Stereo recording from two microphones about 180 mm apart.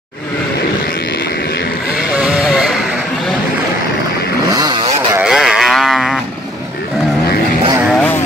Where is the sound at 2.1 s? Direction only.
5° right (ahead or behind).